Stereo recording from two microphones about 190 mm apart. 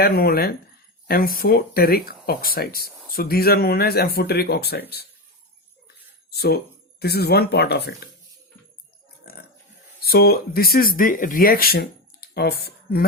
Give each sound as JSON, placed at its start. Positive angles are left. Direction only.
{"t": 0.0, "sound": "speech", "side_deg": 50}
{"t": 6.3, "sound": "speech", "side_deg": 55}
{"t": 10.0, "sound": "speech", "side_deg": 55}